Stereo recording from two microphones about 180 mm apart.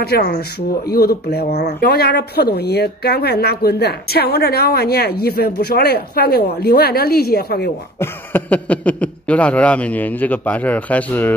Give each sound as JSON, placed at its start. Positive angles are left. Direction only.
{"t": 0.0, "sound": "speech", "side_deg": 60}
{"t": 8.0, "sound": "speech", "side_deg": 10}